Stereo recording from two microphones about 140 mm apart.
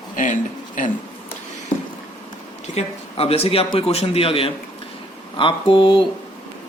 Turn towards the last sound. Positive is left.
turn(degrees=35)  # may be behind; listen again after turning